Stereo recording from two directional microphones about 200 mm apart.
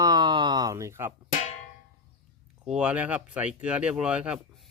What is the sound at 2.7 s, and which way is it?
Speech, 5° right (ahead or behind).